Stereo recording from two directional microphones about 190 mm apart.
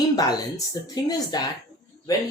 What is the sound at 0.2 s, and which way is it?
Speech, 20° left (ahead or behind).